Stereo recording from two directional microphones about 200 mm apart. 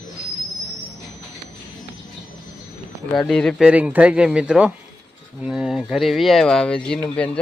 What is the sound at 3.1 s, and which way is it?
Speech, centre (ahead or behind).